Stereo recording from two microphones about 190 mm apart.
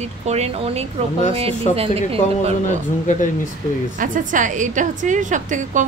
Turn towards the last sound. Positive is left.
turn(degrees=-40)  # may be behind; listen again after turning